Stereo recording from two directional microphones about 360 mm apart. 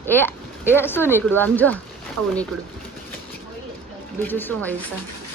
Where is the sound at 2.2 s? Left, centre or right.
Right.